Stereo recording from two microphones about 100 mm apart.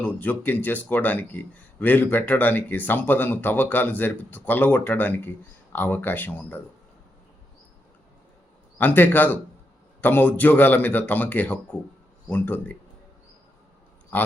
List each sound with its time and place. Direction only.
0.0 s speech: 15° left (ahead or behind)
8.8 s a man's voice: 20° left (ahead or behind)